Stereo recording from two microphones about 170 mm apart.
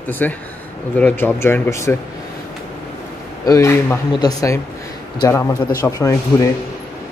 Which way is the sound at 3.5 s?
15° left (ahead or behind).